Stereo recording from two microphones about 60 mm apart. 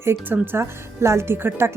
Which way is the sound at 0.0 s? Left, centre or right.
Right.